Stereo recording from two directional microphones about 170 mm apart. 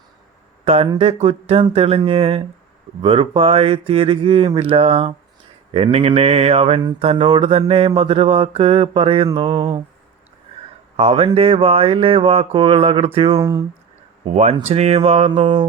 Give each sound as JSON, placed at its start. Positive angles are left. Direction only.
{"t": 0.6, "sound": "speech", "side_deg": -35}
{"t": 10.9, "sound": "speech", "side_deg": -35}
{"t": 13.4, "sound": "speech", "side_deg": -20}
{"t": 14.3, "sound": "speech", "side_deg": -40}